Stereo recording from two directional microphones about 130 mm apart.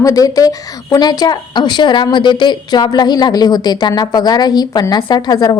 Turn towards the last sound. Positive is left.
turn(degrees=30)  # may be behind; listen again after turning